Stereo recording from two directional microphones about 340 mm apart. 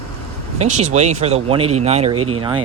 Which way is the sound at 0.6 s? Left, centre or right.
Centre.